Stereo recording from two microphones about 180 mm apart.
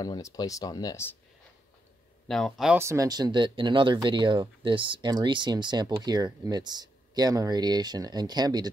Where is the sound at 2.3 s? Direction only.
Centre (ahead or behind).